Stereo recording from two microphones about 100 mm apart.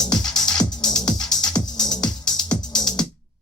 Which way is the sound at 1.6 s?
45° left (ahead or behind).